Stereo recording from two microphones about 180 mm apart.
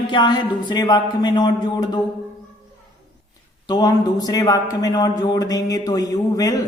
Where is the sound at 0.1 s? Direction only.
25° left (ahead or behind).